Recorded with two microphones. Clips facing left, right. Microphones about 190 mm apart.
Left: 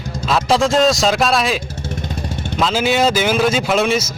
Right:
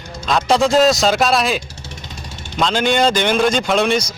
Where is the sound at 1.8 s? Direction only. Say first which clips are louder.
Left 9 dB; 55° left (ahead or behind).